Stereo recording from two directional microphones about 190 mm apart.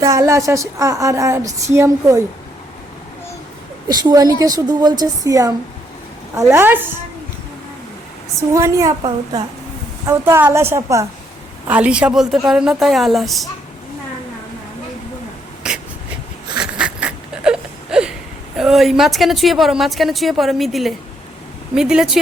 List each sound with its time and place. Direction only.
0.0 s a woman's voice: 15° right (ahead or behind)
3.8 s a woman's voice: 20° right (ahead or behind)
6.5 s a woman's voice: 10° right (ahead or behind)
8.4 s a woman's voice: 15° right (ahead or behind); by 13.5 s centre (ahead or behind)
15.6 s a sound: 5° right (ahead or behind)
16.6 s whimper: 5° right (ahead or behind)
18.5 s a woman's voice: centre (ahead or behind)